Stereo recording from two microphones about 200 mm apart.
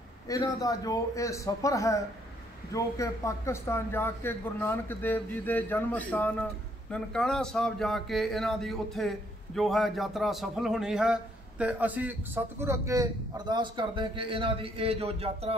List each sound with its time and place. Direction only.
0.3 s a man's voice: 20° left (ahead or behind); by 15.5 s 30° right (ahead or behind)